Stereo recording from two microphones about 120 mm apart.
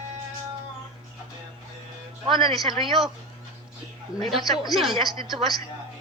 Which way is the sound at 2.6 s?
45° right (ahead or behind).